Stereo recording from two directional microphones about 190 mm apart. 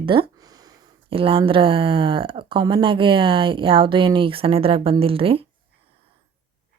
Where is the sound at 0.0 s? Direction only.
25° right (ahead or behind).